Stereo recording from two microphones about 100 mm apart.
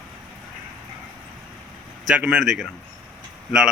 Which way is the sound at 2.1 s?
15° right (ahead or behind).